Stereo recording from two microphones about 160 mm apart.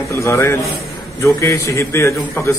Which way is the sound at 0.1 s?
20° left (ahead or behind).